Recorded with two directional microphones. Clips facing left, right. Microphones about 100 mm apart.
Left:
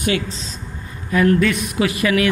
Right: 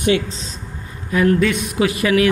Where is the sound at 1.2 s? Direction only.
20° right (ahead or behind).